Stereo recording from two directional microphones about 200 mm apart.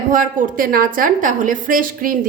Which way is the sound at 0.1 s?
45° right (ahead or behind).